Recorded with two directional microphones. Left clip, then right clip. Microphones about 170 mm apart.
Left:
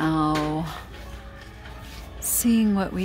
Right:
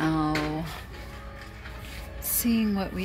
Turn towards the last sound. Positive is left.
turn(degrees=30)  # may be behind; listen again after turning